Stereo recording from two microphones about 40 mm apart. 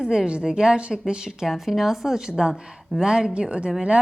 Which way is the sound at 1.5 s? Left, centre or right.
Centre.